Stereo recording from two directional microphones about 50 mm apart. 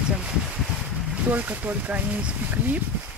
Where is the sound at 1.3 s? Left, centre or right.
Right.